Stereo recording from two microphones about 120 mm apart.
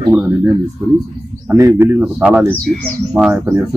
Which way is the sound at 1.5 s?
25° right (ahead or behind).